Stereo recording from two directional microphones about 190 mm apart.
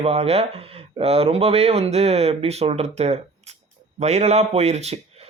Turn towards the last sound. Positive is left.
turn(degrees=-35)  # may be behind; listen again after turning